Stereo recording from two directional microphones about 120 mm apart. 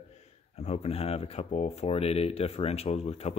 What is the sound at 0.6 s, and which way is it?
Speech, 65° left (ahead or behind).